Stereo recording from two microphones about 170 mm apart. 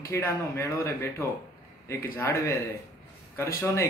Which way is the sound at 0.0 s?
15° left (ahead or behind).